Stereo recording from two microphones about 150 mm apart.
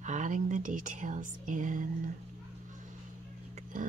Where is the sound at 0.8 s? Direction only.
55° right (ahead or behind).